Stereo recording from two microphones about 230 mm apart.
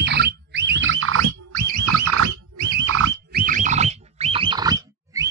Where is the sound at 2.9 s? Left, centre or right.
Right.